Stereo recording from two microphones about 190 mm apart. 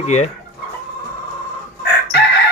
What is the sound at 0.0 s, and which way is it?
Speech, 35° left (ahead or behind).